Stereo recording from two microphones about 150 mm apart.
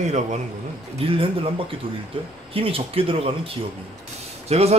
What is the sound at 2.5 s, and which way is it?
Speech, 40° right (ahead or behind).